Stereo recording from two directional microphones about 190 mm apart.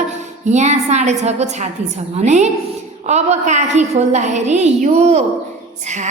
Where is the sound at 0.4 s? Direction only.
35° right (ahead or behind).